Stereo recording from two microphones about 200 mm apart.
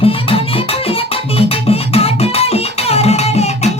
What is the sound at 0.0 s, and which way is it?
Music, 30° left (ahead or behind).